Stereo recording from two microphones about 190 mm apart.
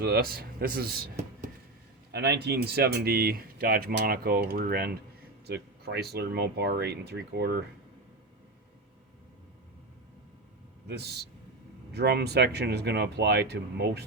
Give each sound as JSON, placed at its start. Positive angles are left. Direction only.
{"t": 0.0, "sound": "speech", "side_deg": -55}
{"t": 2.1, "sound": "speech", "side_deg": -60}
{"t": 10.8, "sound": "speech", "side_deg": -60}